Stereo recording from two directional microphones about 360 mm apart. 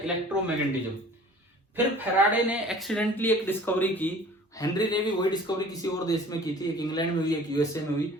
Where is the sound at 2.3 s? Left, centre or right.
Centre.